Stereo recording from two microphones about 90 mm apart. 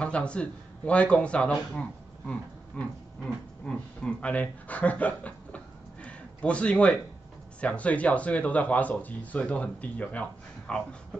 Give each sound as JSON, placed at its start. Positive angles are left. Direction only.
{"t": 0.0, "sound": "speech", "side_deg": 15}
{"t": 2.8, "sound": "speech", "side_deg": 15}
{"t": 6.0, "sound": "a sound", "side_deg": 15}
{"t": 7.6, "sound": "speech", "side_deg": 15}